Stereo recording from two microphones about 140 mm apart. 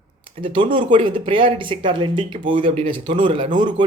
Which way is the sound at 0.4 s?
35° right (ahead or behind).